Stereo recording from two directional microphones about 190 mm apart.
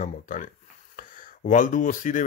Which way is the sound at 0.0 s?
45° left (ahead or behind).